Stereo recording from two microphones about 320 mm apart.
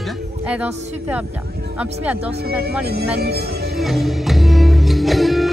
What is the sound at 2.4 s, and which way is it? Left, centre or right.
Speech, right.